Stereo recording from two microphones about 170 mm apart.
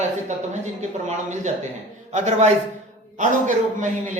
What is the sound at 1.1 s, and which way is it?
A man's voice, 45° right (ahead or behind).